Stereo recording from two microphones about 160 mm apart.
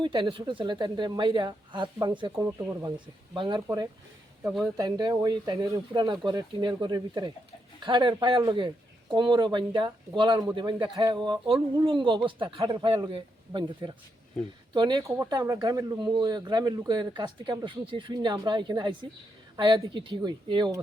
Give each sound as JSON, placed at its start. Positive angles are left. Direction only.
{"t": 0.0, "sound": "a man's voice", "side_deg": -30}
{"t": 3.3, "sound": "a man's voice", "side_deg": -30}
{"t": 4.8, "sound": "a man's voice", "side_deg": -25}